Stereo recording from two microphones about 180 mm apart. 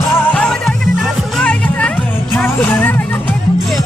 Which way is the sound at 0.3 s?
5° left (ahead or behind).